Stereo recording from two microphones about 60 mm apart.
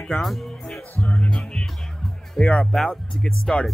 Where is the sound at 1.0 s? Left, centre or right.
Left.